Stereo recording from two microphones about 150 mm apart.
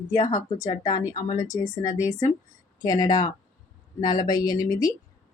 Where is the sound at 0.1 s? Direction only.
25° left (ahead or behind).